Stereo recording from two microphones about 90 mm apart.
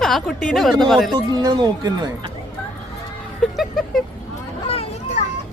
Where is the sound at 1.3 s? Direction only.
50° right (ahead or behind).